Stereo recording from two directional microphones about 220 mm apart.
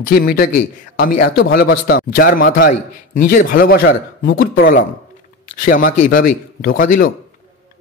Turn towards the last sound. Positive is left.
turn(degrees=40)  # may be behind; listen again after turning